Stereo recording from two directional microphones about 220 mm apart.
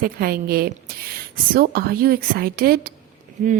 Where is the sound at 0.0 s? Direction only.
45° right (ahead or behind).